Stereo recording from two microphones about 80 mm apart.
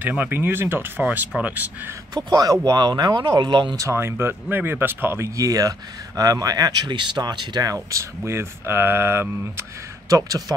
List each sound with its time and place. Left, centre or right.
0.2 s speech: right
2.1 s speech: right
3.9 s speech: right
5.3 s speech: right
7.7 s speech: right